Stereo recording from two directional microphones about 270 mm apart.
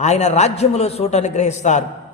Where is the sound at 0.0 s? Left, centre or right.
Left.